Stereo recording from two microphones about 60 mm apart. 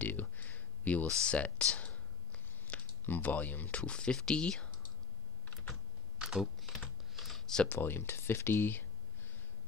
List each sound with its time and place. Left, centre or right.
0.0 s a sound: left
1.0 s a sound: centre
3.1 s speech: left
3.6 s speech: centre
6.2 s typing: centre
7.6 s speech: left